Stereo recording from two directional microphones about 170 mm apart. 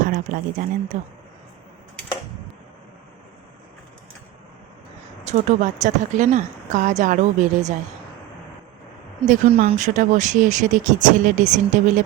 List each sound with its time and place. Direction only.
0.0 s speech: 50° right (ahead or behind)
5.2 s speech: 45° right (ahead or behind)
9.2 s speech: 45° right (ahead or behind)